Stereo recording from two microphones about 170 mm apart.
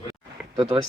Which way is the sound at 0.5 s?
30° right (ahead or behind).